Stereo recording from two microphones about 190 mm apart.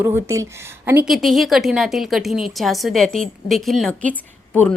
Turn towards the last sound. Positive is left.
turn(degrees=10)  # may be behind; listen again after turning